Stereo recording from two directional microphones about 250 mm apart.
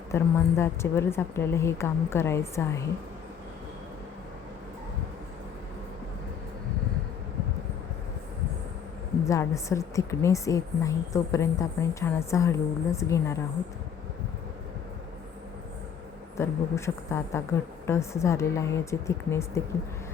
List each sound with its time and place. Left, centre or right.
0.1 s a woman's voice: centre
9.2 s a woman's voice: centre
16.4 s a woman's voice: centre